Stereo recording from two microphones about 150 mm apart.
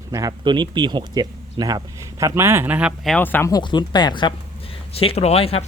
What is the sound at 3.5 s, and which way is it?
Speech, 30° left (ahead or behind).